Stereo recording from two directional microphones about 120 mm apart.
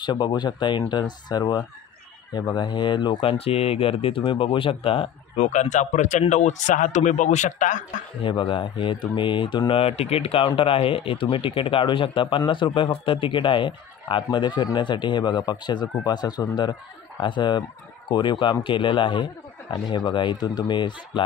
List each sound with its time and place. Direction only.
0.0 s speech: 40° left (ahead or behind)
5.4 s speech: 85° left
8.2 s speech: 45° left (ahead or behind)